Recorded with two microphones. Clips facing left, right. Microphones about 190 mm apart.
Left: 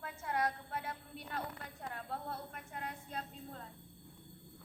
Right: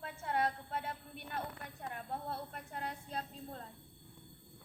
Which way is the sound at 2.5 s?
35° right (ahead or behind).